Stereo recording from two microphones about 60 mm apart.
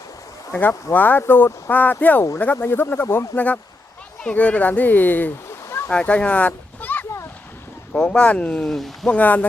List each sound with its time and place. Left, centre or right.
0.9 s speech: left
3.3 s speech: left
5.9 s speech: centre
7.9 s speech: centre
8.6 s speech: centre
9.0 s speech: left